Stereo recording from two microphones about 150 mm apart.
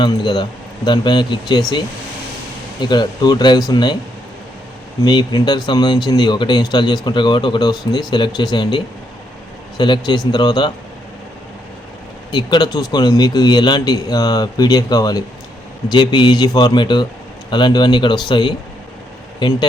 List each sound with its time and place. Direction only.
0.0 s speech: 30° left (ahead or behind)
2.8 s speech: 30° left (ahead or behind)
5.0 s speech: 30° left (ahead or behind)
12.3 s speech: 30° left (ahead or behind)